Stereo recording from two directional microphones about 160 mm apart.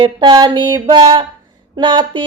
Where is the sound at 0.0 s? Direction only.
25° right (ahead or behind).